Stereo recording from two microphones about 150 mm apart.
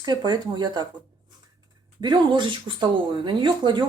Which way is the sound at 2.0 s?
30° right (ahead or behind).